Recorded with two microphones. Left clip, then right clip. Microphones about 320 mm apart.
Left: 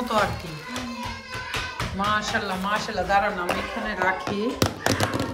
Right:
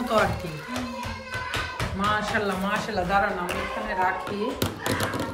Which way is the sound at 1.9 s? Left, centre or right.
Centre.